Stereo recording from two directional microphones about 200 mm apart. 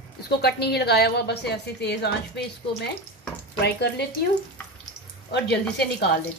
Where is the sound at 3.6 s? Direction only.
55° left (ahead or behind).